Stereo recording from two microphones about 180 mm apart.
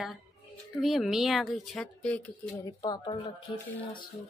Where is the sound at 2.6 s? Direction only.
20° left (ahead or behind).